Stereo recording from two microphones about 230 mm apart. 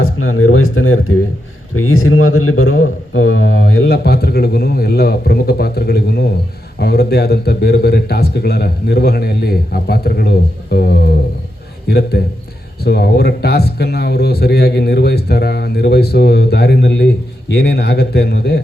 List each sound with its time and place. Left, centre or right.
0.0 s speech: left
3.9 s a man's voice: left